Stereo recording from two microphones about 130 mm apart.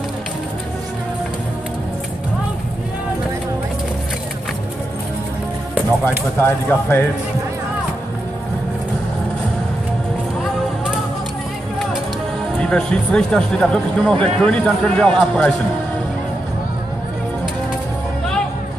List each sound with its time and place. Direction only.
6.0 s speech: 15° left (ahead or behind)
12.5 s speech: 5° left (ahead or behind)